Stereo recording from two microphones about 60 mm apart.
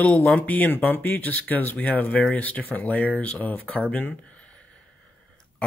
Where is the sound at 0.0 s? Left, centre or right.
Left.